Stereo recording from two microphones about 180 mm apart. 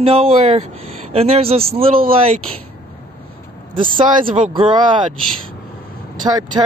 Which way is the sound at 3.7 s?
30° right (ahead or behind).